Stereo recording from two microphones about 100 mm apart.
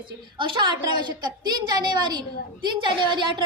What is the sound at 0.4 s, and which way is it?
A woman's voice, 50° right (ahead or behind).